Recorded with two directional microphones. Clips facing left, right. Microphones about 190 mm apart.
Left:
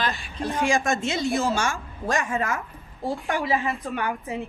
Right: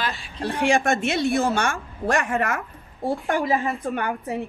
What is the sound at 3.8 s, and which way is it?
Speech, 55° right (ahead or behind).